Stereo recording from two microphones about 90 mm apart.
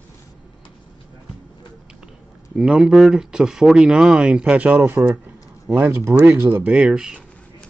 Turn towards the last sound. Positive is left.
turn(degrees=-10)  # may be behind; listen again after turning